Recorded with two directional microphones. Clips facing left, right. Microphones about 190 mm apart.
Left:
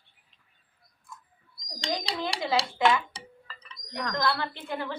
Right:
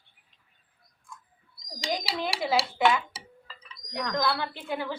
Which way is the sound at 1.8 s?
5° right (ahead or behind).